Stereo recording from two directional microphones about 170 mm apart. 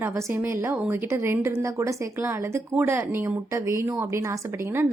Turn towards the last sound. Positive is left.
turn(degrees=-15)  # may be behind; listen again after turning